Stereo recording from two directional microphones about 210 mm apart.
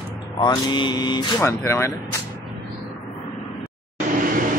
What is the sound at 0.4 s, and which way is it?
Speech, 20° left (ahead or behind).